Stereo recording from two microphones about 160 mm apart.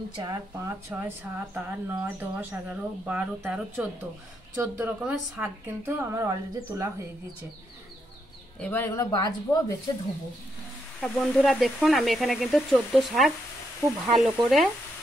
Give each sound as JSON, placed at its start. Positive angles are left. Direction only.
{"t": 0.1, "sound": "speech", "side_deg": -25}
{"t": 4.6, "sound": "speech", "side_deg": -20}
{"t": 8.5, "sound": "speech", "side_deg": 10}
{"t": 9.1, "sound": "a woman's voice", "side_deg": 25}
{"t": 11.0, "sound": "speech", "side_deg": 5}